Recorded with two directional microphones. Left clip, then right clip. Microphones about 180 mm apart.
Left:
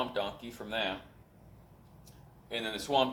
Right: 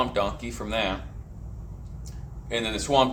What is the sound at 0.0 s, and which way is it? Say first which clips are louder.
Speech: right 9 dB; 20° left (ahead or behind).